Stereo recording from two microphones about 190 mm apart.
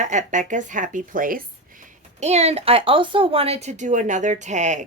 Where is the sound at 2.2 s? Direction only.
35° right (ahead or behind).